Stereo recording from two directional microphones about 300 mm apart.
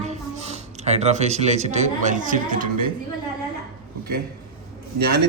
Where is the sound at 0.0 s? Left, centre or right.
Right.